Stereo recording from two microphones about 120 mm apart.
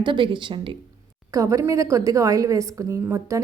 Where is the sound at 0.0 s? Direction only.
45° right (ahead or behind).